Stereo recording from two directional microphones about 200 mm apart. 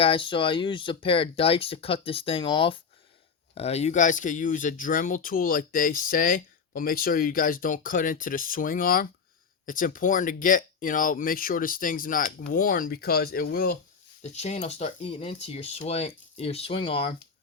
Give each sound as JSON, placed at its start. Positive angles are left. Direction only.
{"t": 0.0, "sound": "speech", "side_deg": 25}
{"t": 14.2, "sound": "speech", "side_deg": 35}